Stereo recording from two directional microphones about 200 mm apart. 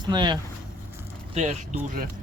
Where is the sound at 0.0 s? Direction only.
20° right (ahead or behind).